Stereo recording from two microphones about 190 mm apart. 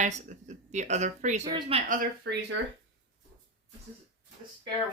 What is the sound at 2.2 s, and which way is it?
Speech, 65° right (ahead or behind).